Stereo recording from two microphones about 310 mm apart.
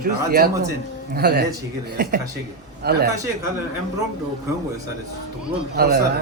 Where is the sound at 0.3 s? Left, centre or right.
Right.